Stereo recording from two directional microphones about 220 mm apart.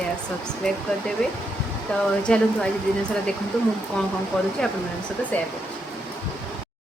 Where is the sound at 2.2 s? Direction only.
5° left (ahead or behind).